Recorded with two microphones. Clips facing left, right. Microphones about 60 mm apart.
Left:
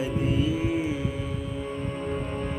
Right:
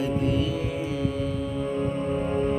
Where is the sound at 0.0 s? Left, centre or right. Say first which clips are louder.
Right 2 dB; centre.